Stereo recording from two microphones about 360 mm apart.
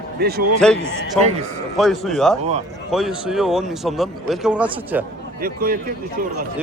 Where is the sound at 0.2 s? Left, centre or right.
Right.